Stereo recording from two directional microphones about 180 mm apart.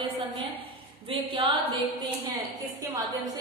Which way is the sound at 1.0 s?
30° right (ahead or behind).